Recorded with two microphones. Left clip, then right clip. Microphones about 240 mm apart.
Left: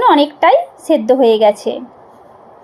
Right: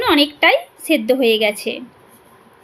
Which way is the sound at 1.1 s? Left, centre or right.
Centre.